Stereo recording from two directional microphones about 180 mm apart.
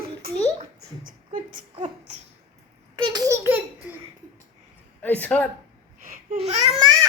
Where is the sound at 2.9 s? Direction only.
25° right (ahead or behind).